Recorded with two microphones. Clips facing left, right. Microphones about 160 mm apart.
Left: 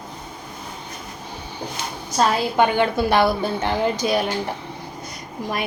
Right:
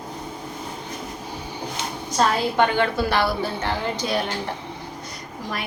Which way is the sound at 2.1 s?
15° left (ahead or behind).